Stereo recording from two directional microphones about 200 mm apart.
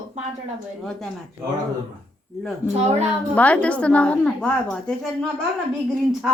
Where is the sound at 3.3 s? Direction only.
5° left (ahead or behind).